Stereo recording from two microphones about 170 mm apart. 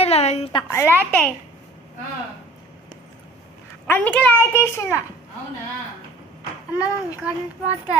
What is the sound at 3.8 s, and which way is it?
A child's voice, 10° left (ahead or behind).